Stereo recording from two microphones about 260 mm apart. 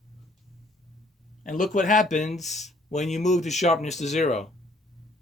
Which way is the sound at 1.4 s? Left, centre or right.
Left.